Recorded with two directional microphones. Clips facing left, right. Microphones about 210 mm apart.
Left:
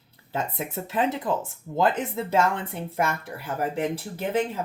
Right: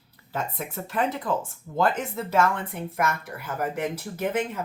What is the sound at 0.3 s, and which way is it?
Speech, 20° left (ahead or behind).